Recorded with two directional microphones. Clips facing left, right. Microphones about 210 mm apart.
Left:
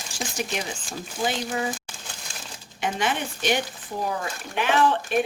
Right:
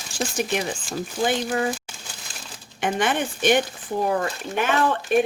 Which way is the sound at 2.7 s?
50° right (ahead or behind).